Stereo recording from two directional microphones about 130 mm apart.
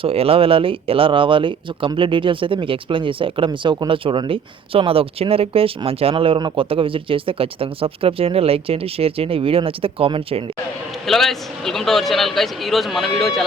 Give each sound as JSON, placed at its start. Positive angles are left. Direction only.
{"t": 0.0, "sound": "speech", "side_deg": -50}
{"t": 11.0, "sound": "a man's voice", "side_deg": 0}